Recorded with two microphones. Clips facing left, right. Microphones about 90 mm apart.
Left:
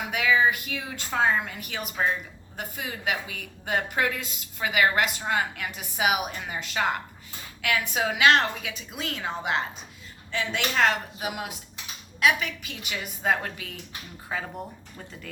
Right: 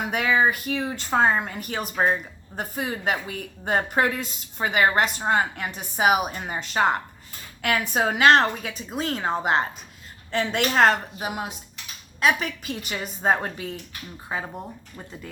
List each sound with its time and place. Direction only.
0.0 s a woman's voice: 40° right (ahead or behind)
14.3 s speech: 20° right (ahead or behind)